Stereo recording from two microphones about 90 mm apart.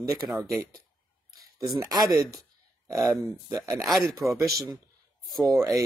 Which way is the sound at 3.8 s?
Centre (ahead or behind).